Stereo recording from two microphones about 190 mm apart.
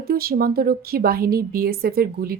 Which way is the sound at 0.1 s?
50° right (ahead or behind).